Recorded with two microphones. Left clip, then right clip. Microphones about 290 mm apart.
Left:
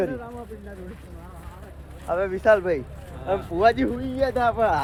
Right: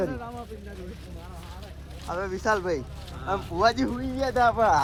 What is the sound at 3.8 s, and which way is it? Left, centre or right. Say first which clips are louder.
Speech: left 4 dB; right.